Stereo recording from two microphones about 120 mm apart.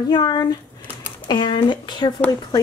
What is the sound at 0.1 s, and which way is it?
Speech, 35° left (ahead or behind).